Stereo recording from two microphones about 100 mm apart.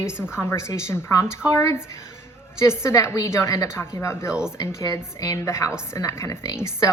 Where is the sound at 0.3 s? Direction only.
25° left (ahead or behind).